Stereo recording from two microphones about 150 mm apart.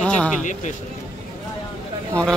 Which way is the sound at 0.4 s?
55° left (ahead or behind).